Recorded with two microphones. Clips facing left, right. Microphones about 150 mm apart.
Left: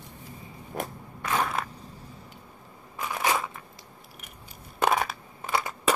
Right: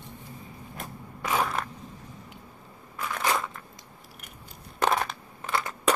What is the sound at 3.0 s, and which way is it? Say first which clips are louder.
Crushing: left 1 dB; 10° left (ahead or behind).